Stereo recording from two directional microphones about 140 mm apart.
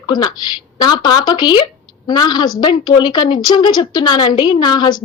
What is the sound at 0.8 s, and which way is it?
A woman's voice, 30° left (ahead or behind).